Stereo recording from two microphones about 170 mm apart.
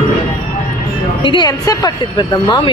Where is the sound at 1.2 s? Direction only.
25° left (ahead or behind).